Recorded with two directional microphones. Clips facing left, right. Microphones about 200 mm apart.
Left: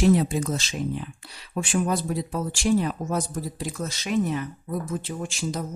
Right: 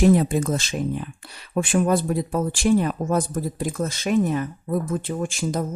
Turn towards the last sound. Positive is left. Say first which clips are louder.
# right 5 dB
turn(degrees=-50)  # may be behind; listen again after turning